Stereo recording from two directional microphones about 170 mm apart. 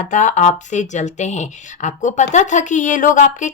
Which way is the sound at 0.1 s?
45° left (ahead or behind).